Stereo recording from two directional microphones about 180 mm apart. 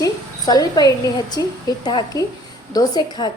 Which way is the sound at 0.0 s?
20° left (ahead or behind).